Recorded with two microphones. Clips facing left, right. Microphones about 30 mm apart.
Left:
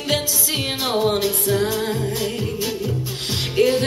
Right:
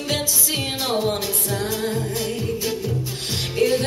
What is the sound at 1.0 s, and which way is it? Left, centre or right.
Music, centre.